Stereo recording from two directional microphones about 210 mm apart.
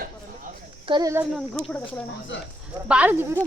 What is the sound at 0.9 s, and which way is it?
Speech, 15° right (ahead or behind).